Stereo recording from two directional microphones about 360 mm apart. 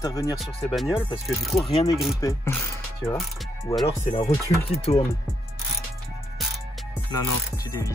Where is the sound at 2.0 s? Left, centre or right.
Centre.